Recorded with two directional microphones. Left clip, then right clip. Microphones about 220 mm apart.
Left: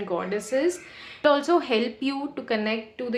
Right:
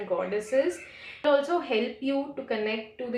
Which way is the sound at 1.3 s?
45° left (ahead or behind).